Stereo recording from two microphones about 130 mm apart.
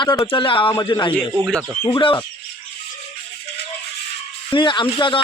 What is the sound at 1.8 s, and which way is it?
Speech, 40° left (ahead or behind).